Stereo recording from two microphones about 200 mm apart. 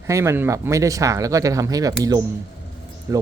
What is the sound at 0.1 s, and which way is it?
Speech, 15° right (ahead or behind).